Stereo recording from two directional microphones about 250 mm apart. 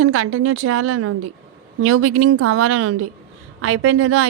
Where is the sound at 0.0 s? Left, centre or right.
Right.